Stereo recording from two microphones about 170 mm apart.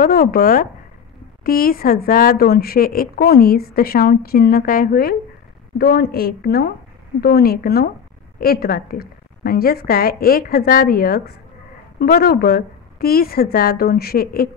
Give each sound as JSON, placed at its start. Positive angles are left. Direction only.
{"t": 0.0, "sound": "a woman's voice", "side_deg": 60}